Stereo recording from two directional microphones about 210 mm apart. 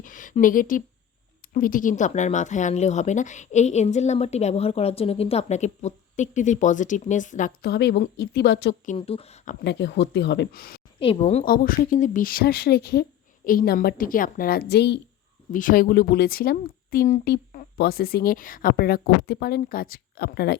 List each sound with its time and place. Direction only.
0.0 s a sound: 40° left (ahead or behind)
1.5 s speech: 40° left (ahead or behind)
8.9 s speech: 25° left (ahead or behind)
9.6 s speech: 55° left (ahead or behind)
11.0 s speech: 30° left (ahead or behind)
11.4 s speech: 45° left (ahead or behind)
15.5 s speech: 40° left (ahead or behind)